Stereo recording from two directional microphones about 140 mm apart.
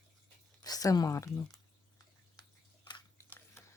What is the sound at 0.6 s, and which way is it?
Speech, 25° left (ahead or behind).